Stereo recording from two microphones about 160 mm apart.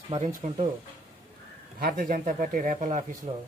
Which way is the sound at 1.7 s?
65° right (ahead or behind).